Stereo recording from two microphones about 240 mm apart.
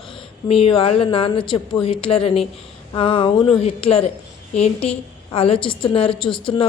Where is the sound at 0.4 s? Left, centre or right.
Left.